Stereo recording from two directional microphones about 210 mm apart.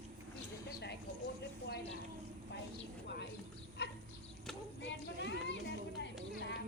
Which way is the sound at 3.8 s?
50° left (ahead or behind).